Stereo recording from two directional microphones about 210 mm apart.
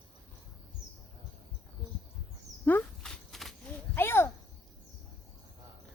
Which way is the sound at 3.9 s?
10° left (ahead or behind).